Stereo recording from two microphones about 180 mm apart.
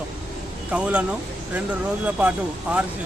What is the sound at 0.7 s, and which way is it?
Speech, 5° right (ahead or behind).